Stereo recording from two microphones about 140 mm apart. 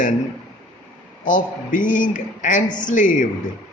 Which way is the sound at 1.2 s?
65° left (ahead or behind).